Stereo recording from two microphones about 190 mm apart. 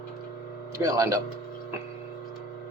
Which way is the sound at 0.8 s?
15° right (ahead or behind).